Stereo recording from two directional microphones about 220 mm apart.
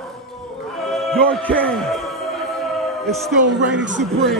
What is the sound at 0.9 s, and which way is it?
A man's voice, centre (ahead or behind).